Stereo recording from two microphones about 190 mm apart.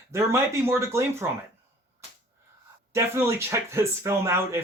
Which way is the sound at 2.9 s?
15° right (ahead or behind).